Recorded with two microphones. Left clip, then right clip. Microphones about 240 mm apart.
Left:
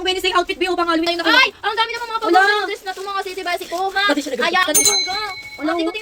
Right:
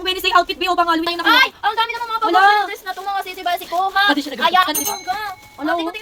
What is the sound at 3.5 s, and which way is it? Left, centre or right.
Speech, centre.